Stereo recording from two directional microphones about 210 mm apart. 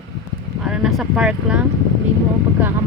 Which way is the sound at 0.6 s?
Centre (ahead or behind).